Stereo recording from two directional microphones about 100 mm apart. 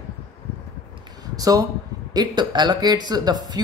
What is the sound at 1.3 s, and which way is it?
Speech, 40° right (ahead or behind).